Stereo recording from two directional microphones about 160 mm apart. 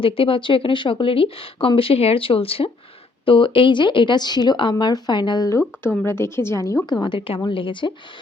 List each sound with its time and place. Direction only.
0.0 s speech: 35° left (ahead or behind)